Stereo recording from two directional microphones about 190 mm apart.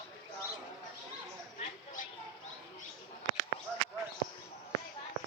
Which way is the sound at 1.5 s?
45° left (ahead or behind).